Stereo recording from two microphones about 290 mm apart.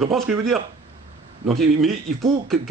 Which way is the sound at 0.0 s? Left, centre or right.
Centre.